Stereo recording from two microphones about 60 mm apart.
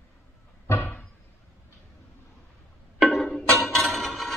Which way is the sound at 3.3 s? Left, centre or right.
Centre.